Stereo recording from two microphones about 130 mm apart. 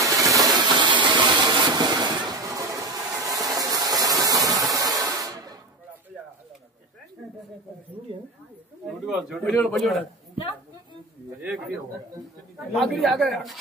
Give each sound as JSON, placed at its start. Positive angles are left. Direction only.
{"t": 0.0, "sound": "a sound", "side_deg": -25}
{"t": 9.0, "sound": "speech", "side_deg": 0}
{"t": 9.4, "sound": "speech", "side_deg": 10}
{"t": 12.7, "sound": "speech", "side_deg": 0}